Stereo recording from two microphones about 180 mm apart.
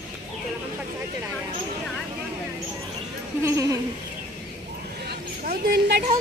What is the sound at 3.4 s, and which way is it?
Speech, 15° right (ahead or behind).